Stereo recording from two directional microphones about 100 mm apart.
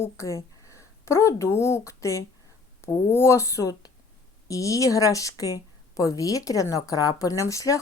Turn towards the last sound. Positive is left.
turn(degrees=35)  # may be behind; listen again after turning